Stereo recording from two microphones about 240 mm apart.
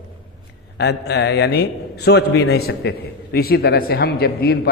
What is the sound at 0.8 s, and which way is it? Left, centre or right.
A man's voice, left.